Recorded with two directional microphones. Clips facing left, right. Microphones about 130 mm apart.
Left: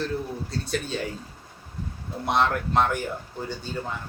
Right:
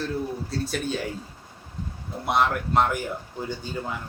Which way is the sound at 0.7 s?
5° right (ahead or behind).